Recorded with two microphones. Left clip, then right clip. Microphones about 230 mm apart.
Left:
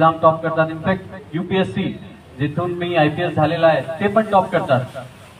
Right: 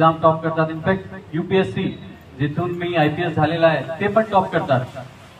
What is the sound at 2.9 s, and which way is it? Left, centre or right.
A man's voice, left.